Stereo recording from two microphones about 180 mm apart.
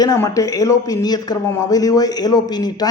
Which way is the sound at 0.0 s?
20° left (ahead or behind).